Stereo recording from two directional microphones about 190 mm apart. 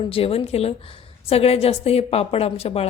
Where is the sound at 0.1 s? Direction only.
30° left (ahead or behind).